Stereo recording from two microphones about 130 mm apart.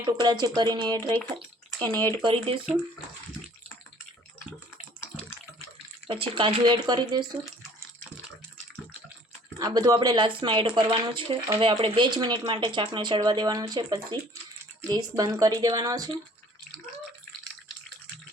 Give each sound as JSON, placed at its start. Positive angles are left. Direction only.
{"t": 0.0, "sound": "speech", "side_deg": -30}
{"t": 1.8, "sound": "speech", "side_deg": 15}
{"t": 2.2, "sound": "speech", "side_deg": -45}
{"t": 6.1, "sound": "speech", "side_deg": -45}
{"t": 9.6, "sound": "speech", "side_deg": -30}